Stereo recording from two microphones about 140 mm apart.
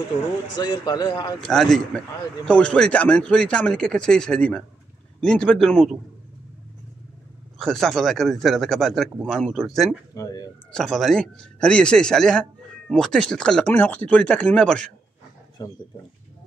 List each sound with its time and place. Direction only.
0.6 s speech: 30° left (ahead or behind)
1.4 s a man's voice: 5° left (ahead or behind)
7.5 s speech: centre (ahead or behind)
10.1 s speech: 25° left (ahead or behind)
10.7 s speech: centre (ahead or behind)
15.6 s speech: 25° left (ahead or behind)